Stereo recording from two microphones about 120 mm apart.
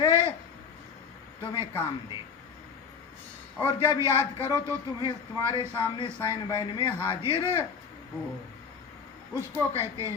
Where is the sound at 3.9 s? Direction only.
25° right (ahead or behind).